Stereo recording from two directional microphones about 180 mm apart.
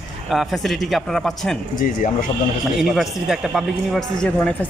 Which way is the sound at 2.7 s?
Centre (ahead or behind).